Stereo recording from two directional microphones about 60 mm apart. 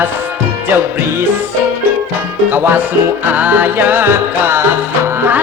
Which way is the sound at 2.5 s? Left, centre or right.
Right.